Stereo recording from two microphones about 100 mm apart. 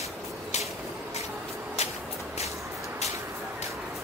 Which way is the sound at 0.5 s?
90° left.